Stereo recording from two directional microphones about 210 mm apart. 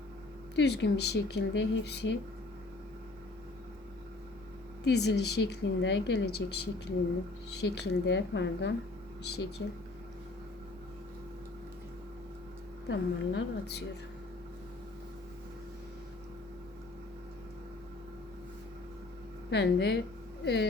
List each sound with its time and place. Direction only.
0.5 s speech: 55° left (ahead or behind)
4.8 s speech: 50° left (ahead or behind)
12.9 s speech: 55° left (ahead or behind)
19.5 s speech: 55° left (ahead or behind)